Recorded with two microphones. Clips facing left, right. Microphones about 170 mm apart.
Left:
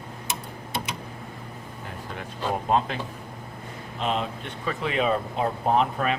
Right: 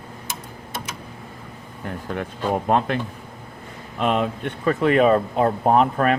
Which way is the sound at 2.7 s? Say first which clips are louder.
Right 2 dB; 60° right (ahead or behind).